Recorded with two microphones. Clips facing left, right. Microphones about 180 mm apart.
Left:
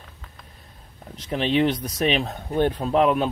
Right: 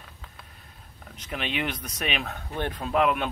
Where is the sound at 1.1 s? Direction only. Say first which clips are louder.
Left 9 dB; 35° left (ahead or behind).